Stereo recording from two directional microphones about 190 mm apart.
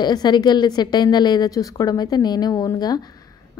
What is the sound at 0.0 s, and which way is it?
A woman's voice, 20° left (ahead or behind).